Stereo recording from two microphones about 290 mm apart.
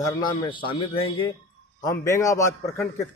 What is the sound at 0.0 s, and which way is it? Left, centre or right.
A man's voice, centre.